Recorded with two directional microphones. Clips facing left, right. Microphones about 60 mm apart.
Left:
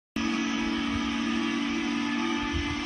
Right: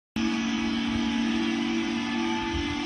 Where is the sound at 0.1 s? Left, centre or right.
Left.